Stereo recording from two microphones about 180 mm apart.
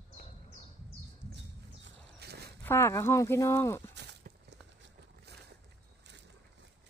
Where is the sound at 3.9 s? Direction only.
70° right (ahead or behind).